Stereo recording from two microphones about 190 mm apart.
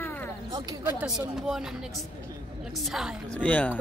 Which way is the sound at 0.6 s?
15° right (ahead or behind).